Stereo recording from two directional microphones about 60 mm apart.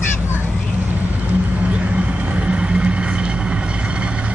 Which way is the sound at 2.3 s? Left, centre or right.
Centre.